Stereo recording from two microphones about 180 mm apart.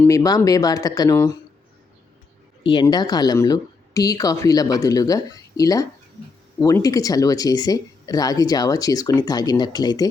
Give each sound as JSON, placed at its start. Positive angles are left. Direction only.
{"t": 0.0, "sound": "speech", "side_deg": 20}
{"t": 2.6, "sound": "speech", "side_deg": 25}